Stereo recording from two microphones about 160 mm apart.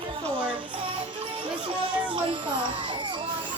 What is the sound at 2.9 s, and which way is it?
Children playing, 30° right (ahead or behind).